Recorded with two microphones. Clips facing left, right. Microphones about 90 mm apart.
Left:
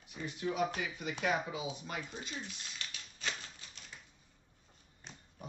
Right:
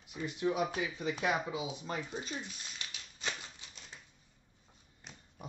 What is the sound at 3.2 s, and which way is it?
Typewriter, 20° right (ahead or behind).